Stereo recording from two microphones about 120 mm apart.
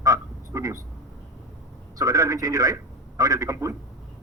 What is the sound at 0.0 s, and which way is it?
Frog, 30° right (ahead or behind).